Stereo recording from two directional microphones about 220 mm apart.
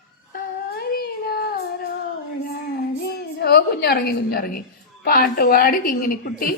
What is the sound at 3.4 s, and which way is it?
A woman's voice, 45° left (ahead or behind).